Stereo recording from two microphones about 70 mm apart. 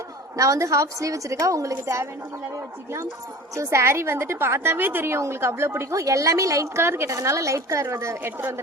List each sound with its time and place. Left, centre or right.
0.3 s a woman's voice: right
3.5 s a woman's voice: right